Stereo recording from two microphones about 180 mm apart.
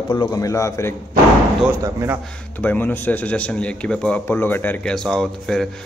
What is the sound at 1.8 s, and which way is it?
Speech, 15° right (ahead or behind).